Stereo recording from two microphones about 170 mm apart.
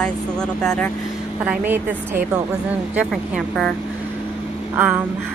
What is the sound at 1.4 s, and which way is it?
Speech, 10° right (ahead or behind).